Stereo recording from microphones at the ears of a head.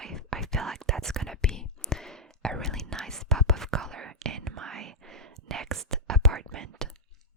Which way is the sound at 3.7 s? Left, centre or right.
Right.